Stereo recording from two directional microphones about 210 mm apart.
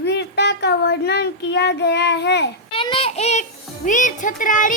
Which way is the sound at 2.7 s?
25° left (ahead or behind).